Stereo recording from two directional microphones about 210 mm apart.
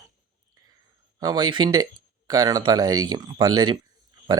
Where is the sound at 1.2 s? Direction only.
20° right (ahead or behind).